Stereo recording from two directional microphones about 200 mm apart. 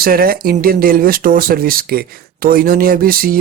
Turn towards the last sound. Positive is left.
turn(degrees=-45)  # may be behind; listen again after turning